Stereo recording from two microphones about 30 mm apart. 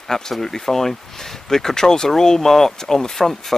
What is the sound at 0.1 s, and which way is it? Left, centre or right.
Speech, centre.